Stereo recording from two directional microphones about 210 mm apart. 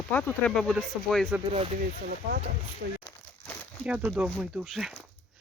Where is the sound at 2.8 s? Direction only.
50° right (ahead or behind).